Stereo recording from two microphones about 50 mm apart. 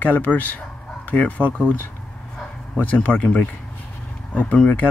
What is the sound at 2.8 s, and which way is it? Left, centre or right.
Speech, left.